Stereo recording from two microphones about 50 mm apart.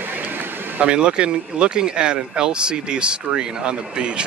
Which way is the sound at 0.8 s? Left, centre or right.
Right.